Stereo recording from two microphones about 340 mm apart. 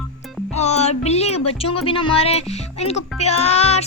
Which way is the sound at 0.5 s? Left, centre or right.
Centre.